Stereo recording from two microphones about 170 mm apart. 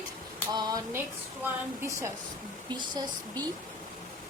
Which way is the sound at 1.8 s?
15° right (ahead or behind).